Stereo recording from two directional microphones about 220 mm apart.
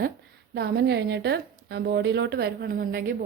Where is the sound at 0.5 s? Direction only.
50° right (ahead or behind).